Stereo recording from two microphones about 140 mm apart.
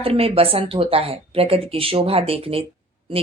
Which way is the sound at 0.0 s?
45° right (ahead or behind).